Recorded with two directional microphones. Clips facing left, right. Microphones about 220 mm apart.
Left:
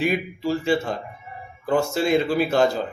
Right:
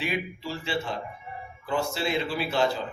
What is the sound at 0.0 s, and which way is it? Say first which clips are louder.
A man's voice: left 8 dB; 45° left (ahead or behind).